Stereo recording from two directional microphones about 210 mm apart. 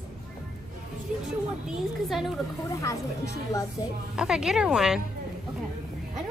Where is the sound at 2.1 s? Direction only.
Centre (ahead or behind).